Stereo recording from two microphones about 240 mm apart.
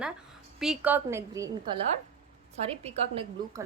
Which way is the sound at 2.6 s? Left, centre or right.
Right.